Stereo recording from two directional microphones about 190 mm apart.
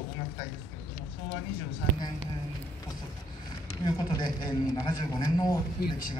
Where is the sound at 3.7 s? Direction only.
20° left (ahead or behind).